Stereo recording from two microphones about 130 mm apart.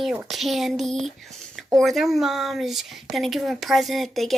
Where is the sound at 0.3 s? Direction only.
Centre (ahead or behind).